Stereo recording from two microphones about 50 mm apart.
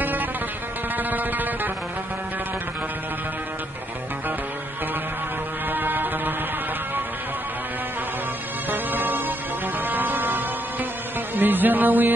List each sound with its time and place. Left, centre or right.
0.0 s music: right
5.7 s music: right
8.6 s music: right